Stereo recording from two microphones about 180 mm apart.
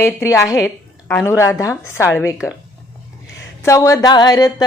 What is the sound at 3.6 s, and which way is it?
Music, 15° left (ahead or behind).